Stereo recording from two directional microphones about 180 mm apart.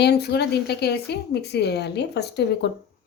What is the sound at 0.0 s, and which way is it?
A woman's voice, 65° left (ahead or behind).